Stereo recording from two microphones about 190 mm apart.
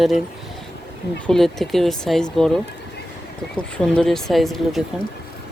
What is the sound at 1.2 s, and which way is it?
Speech, centre (ahead or behind).